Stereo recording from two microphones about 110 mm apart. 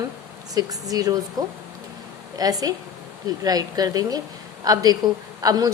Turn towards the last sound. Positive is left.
turn(degrees=-35)  # may be behind; listen again after turning